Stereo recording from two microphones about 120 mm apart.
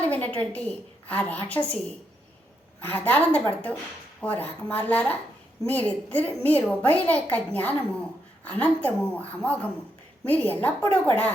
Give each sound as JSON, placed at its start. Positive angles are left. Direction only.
{"t": 0.0, "sound": "a woman's voice", "side_deg": 15}
{"t": 2.8, "sound": "a woman's voice", "side_deg": 15}